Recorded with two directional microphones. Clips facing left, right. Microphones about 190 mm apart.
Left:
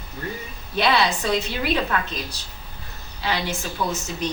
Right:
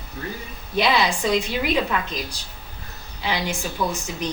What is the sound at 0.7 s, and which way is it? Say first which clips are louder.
Speech: even; 15° right (ahead or behind).